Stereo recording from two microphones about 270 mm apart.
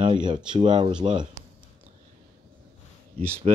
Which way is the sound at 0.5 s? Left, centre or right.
Centre.